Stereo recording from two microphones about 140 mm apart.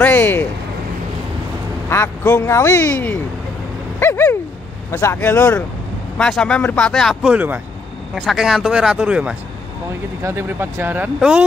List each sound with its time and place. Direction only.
0.0 s a man's voice: 15° left (ahead or behind)
1.9 s a man's voice: 20° left (ahead or behind)
4.0 s a sound: 15° left (ahead or behind)
4.9 s a man's voice: 15° left (ahead or behind)
7.3 s speech: 15° right (ahead or behind)
8.1 s speech: 5° right (ahead or behind)
10.2 s speech: 15° right (ahead or behind)